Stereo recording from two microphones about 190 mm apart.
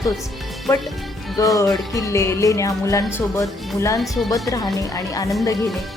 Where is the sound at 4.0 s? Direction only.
Centre (ahead or behind).